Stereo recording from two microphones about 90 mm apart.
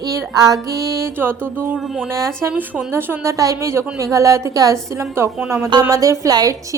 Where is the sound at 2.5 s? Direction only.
15° right (ahead or behind).